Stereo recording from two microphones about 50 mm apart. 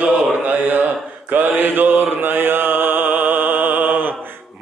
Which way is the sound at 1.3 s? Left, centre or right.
Right.